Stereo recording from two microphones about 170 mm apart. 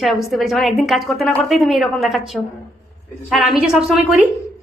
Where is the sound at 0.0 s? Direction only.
Centre (ahead or behind).